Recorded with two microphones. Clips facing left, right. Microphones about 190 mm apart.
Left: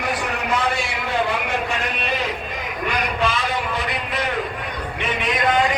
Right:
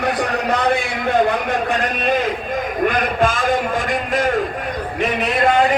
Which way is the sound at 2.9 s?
50° right (ahead or behind).